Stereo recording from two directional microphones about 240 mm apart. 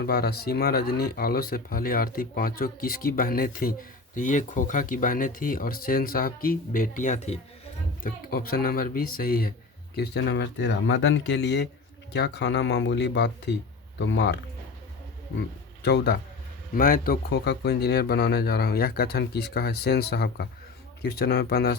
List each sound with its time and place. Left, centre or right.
0.0 s speech: left
15.4 s speech: left